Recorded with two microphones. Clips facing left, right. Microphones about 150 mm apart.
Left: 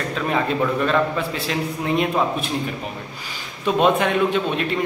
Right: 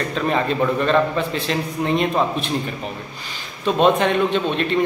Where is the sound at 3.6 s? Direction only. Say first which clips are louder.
Right 1 dB; 10° left (ahead or behind).